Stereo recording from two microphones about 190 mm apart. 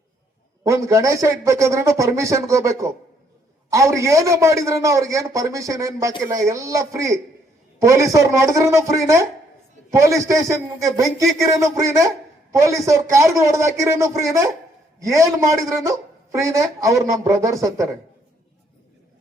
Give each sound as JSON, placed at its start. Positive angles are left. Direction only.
{"t": 0.7, "sound": "a man's voice", "side_deg": -15}